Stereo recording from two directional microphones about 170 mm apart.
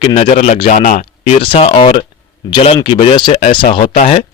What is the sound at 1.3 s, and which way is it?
Speech, 35° left (ahead or behind).